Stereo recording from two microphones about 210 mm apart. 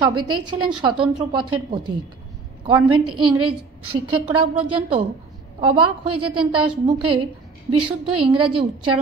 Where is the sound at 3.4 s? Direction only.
90° right.